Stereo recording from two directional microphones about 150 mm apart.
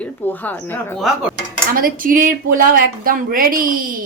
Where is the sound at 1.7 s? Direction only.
75° right (ahead or behind).